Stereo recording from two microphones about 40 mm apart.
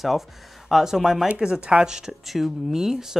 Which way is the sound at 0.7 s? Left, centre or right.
Centre.